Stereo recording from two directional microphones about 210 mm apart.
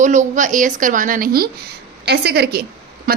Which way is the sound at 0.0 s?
35° right (ahead or behind).